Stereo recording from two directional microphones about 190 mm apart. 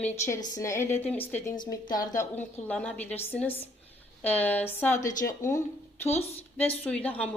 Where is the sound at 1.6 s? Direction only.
20° left (ahead or behind).